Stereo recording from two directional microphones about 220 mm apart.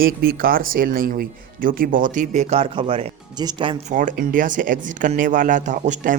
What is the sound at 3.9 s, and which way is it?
A man's voice, 35° right (ahead or behind).